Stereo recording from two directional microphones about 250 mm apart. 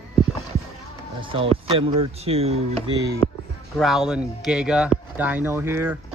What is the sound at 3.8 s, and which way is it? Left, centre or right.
A man's voice, centre.